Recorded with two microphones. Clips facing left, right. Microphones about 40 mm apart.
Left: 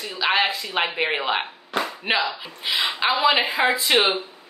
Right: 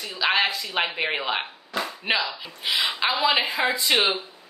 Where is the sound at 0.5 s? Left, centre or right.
Left.